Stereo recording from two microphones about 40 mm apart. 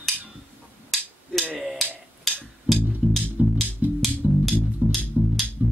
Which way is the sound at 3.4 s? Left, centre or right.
Right.